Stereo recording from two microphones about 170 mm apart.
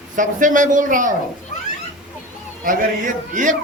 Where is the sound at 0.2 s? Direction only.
50° right (ahead or behind).